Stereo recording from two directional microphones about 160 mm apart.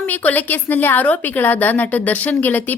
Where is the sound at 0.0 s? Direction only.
10° left (ahead or behind).